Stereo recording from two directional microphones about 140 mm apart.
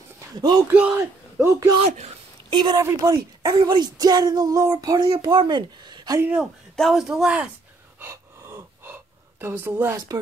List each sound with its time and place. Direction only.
0.4 s a woman's voice: 30° right (ahead or behind)
0.7 s a man's voice: 15° right (ahead or behind)
2.5 s a woman's voice: 30° right (ahead or behind)
5.0 s speech: 35° right (ahead or behind)
6.4 s speech: centre (ahead or behind)
8.0 s gasp: 20° right (ahead or behind)
9.9 s speech: 25° right (ahead or behind)